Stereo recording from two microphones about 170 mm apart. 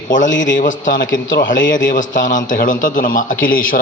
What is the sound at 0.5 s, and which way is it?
A man's voice, 50° left (ahead or behind).